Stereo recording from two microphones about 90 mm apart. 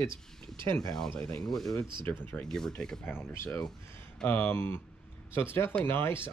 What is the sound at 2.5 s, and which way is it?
Speech, 5° left (ahead or behind).